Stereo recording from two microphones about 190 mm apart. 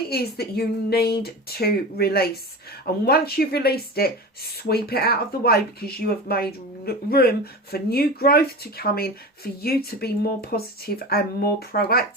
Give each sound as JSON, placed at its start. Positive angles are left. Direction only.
{"t": 0.1, "sound": "speech", "side_deg": 55}